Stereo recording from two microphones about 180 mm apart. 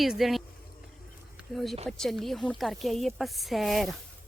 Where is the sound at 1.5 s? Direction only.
Centre (ahead or behind).